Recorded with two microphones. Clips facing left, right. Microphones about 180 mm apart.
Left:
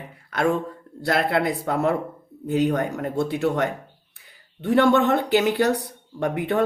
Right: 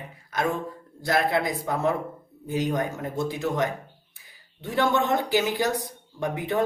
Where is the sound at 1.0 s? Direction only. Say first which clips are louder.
Left 2 dB; 65° left (ahead or behind).